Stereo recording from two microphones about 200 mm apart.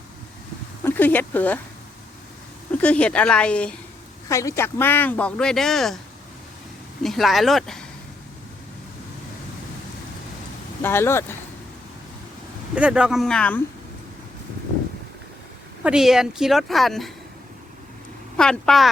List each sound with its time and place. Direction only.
0.9 s speech: 10° left (ahead or behind)
2.8 s a woman's voice: 5° left (ahead or behind)
7.0 s a woman's voice: centre (ahead or behind)
10.8 s speech: 10° left (ahead or behind)
12.7 s a woman's voice: 5° right (ahead or behind)
15.8 s a woman's voice: 5° right (ahead or behind)
18.3 s a woman's voice: 5° left (ahead or behind)